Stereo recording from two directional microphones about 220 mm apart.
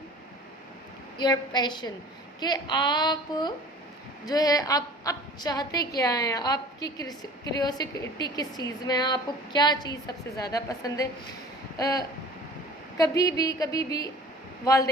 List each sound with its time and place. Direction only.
1.2 s a woman's voice: 20° left (ahead or behind)